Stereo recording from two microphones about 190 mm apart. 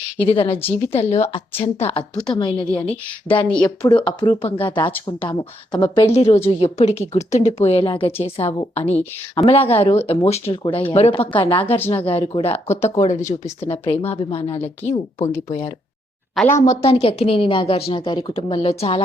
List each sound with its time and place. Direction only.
0.3 s a woman's voice: 30° left (ahead or behind)
2.1 s a woman's voice: 5° left (ahead or behind)
2.4 s a woman's voice: 25° left (ahead or behind)
16.6 s a woman's voice: 30° left (ahead or behind)